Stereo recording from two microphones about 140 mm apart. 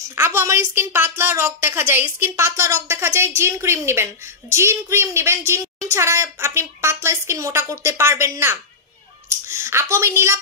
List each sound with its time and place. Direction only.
0.1 s a woman's voice: 20° right (ahead or behind)